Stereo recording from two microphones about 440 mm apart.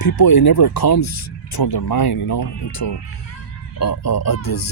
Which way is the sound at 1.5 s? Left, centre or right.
Left.